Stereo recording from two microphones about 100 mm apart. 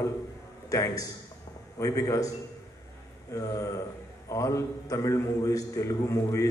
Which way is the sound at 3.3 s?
35° left (ahead or behind).